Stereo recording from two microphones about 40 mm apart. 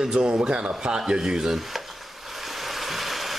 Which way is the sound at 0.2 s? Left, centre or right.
Right.